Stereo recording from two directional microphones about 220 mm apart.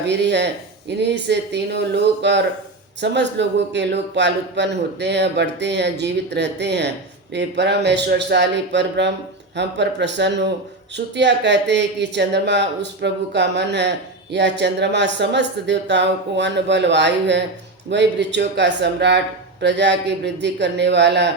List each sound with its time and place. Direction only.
0.1 s speech: 50° right (ahead or behind)